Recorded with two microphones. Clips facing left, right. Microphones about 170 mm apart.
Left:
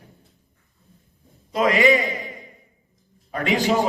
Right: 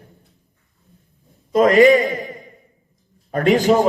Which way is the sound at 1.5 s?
45° right (ahead or behind).